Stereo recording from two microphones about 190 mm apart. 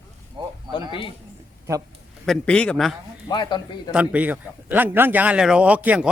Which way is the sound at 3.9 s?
5° right (ahead or behind).